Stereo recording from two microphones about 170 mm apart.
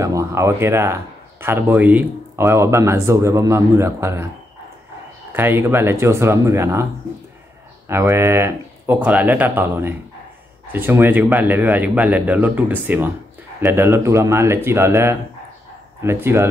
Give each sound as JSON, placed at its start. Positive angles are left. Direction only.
{"t": 0.0, "sound": "speech", "side_deg": -20}
{"t": 5.3, "sound": "speech", "side_deg": -15}
{"t": 7.9, "sound": "speech", "side_deg": -15}